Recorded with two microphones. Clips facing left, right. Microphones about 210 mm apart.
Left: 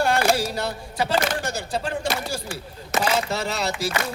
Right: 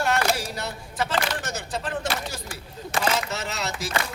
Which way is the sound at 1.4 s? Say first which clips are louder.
Left 4 dB; 30° left (ahead or behind).